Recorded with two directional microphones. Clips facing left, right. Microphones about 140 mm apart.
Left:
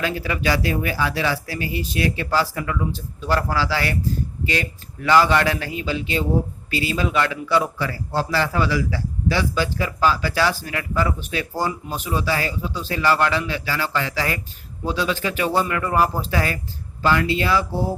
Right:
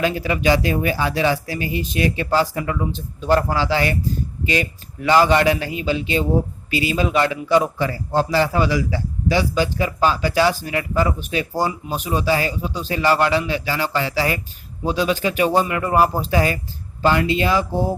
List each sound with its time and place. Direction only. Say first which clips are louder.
0.0 s a man's voice: right 4 dB; 20° right (ahead or behind)